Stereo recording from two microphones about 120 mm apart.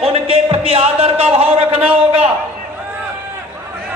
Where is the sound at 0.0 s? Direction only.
55° right (ahead or behind).